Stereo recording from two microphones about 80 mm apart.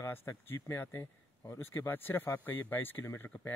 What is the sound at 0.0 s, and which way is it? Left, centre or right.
Speech, left.